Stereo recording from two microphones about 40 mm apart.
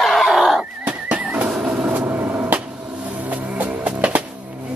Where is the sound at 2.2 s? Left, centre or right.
Right.